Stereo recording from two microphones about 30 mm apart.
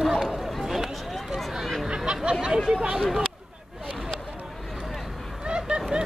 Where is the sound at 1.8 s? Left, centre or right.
Right.